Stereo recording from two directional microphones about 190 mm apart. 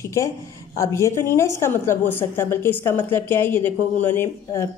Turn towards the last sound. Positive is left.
turn(degrees=15)  # may be behind; listen again after turning